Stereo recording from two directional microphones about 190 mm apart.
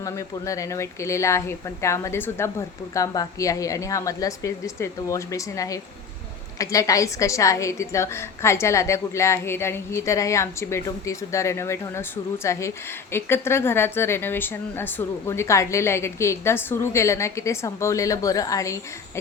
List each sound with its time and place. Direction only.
0.0 s a woman's voice: 15° left (ahead or behind)